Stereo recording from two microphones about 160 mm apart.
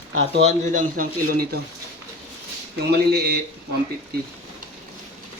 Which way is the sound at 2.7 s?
90° right.